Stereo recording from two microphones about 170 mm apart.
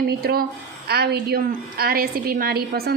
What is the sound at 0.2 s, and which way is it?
A woman's voice, 65° right (ahead or behind).